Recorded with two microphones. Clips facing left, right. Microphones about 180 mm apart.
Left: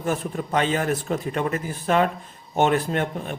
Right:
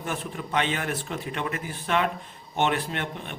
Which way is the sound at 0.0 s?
40° left (ahead or behind).